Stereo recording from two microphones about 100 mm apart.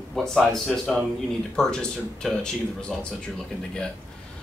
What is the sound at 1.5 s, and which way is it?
Speech, 5° left (ahead or behind).